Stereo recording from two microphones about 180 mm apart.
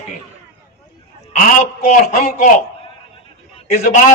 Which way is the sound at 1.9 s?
45° left (ahead or behind).